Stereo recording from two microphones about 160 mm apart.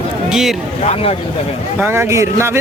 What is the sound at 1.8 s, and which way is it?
Speech, 15° right (ahead or behind).